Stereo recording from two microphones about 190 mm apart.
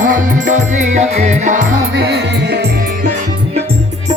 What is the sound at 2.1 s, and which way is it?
Music, 60° right (ahead or behind).